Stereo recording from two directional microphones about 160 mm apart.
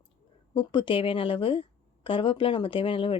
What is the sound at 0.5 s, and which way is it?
Speech, 30° left (ahead or behind).